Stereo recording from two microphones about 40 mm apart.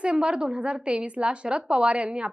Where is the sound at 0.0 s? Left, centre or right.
Right.